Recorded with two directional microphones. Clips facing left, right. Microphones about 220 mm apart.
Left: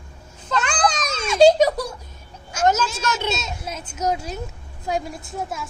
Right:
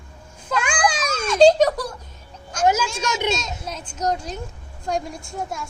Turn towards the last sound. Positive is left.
turn(degrees=0)  # may be behind; listen again after turning